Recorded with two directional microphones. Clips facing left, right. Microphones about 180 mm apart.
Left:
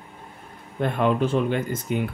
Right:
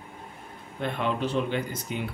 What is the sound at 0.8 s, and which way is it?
Speech, 50° left (ahead or behind).